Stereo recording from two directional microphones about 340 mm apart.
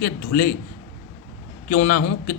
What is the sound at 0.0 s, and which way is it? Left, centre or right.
Speech, left.